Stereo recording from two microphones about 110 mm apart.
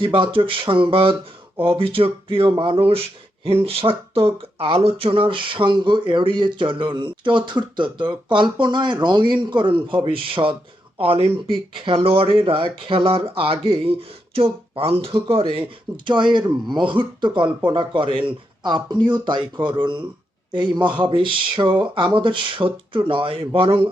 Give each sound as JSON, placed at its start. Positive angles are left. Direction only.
{"t": 0.0, "sound": "speech", "side_deg": -50}
{"t": 16.0, "sound": "speech", "side_deg": -45}